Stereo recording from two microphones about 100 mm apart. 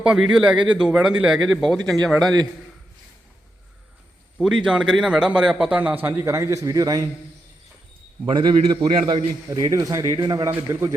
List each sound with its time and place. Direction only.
0.0 s a man's voice: 10° right (ahead or behind)
4.4 s a man's voice: 5° right (ahead or behind); by 7.1 s 35° right (ahead or behind)
8.3 s a man's voice: 50° right (ahead or behind)
9.0 s a man's voice: 65° right (ahead or behind)
9.5 s a man's voice: 35° right (ahead or behind)
10.7 s speech: 30° right (ahead or behind)